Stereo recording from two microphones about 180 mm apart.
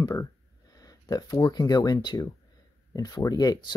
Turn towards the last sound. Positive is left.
turn(degrees=20)  # may be behind; listen again after turning